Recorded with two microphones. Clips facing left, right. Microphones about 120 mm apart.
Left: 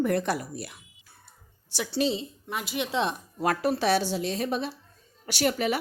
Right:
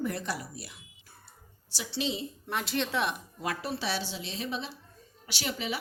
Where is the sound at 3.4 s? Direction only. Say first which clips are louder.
Left 9 dB; 50° left (ahead or behind).